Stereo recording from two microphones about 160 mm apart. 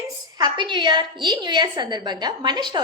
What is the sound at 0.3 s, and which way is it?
A woman's voice, 25° right (ahead or behind).